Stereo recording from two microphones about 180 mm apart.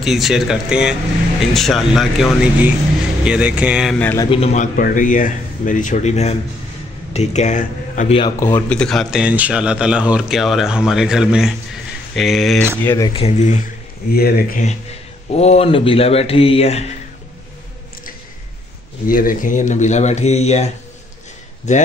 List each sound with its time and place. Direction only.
0.0 s speech: centre (ahead or behind)
4.0 s a man's voice: 10° left (ahead or behind)
4.3 s speech: 35° left (ahead or behind)
8.4 s speech: 15° left (ahead or behind)
12.8 s a man's voice: 15° left (ahead or behind)
13.1 s speech: 35° left (ahead or behind)
14.1 s speech: 60° left (ahead or behind)
14.6 s speech: 40° left (ahead or behind)
19.0 s speech: 50° left (ahead or behind)
21.7 s speech: 40° left (ahead or behind)